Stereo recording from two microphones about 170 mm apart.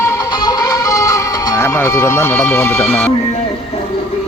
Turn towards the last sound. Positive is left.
turn(degrees=10)  # may be behind; listen again after turning